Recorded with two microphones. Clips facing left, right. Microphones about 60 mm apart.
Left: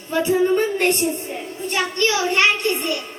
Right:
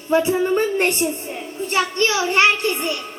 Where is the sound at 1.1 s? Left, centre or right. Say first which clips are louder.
Left 1 dB; centre.